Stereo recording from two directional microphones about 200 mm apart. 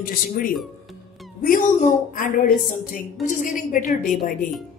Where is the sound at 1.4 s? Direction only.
40° left (ahead or behind).